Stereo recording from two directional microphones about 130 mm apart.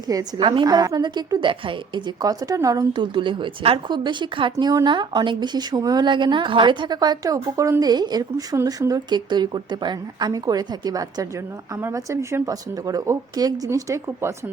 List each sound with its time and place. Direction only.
0.3 s speech: 40° right (ahead or behind)
2.2 s speech: 25° right (ahead or behind)